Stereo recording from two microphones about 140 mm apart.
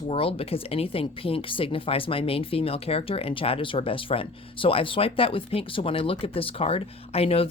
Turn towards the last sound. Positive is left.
turn(degrees=45)  # may be behind; listen again after turning